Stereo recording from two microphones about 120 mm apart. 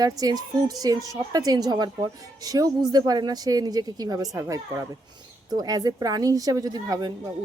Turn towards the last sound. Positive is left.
turn(degrees=-35)  # may be behind; listen again after turning